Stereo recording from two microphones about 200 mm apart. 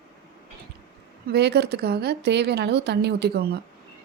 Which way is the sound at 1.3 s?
55° right (ahead or behind).